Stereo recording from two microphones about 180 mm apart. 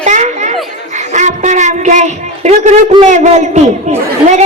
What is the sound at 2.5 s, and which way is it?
Speech, 40° right (ahead or behind).